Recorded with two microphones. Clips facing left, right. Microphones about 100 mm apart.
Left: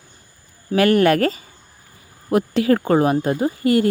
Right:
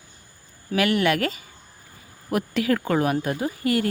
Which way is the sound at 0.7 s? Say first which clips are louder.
Left 6 dB; 40° left (ahead or behind).